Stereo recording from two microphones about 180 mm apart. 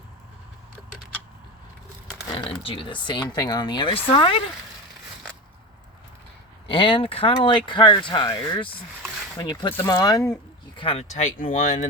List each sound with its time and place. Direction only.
2.3 s speech: 30° left (ahead or behind)
6.7 s speech: 30° left (ahead or behind)
10.8 s speech: 30° left (ahead or behind)